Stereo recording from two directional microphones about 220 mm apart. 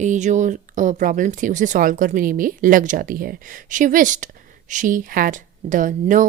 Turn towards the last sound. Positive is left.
turn(degrees=-35)  # may be behind; listen again after turning